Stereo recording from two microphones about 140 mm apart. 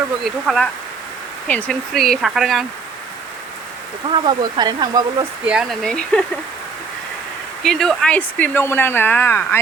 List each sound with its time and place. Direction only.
0.2 s speech: centre (ahead or behind)
4.1 s speech: 30° right (ahead or behind)
5.5 s speech: centre (ahead or behind)
7.6 s speech: 5° left (ahead or behind)